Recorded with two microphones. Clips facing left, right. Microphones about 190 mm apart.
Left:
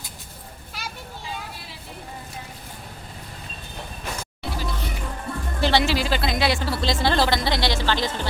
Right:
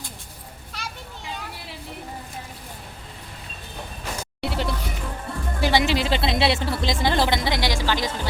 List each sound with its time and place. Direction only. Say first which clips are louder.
4.4 s music: right 6 dB; 70° right (ahead or behind)
5.5 s speech: even; 15° right (ahead or behind)